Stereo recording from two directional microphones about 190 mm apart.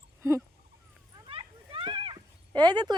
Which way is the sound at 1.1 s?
25° right (ahead or behind).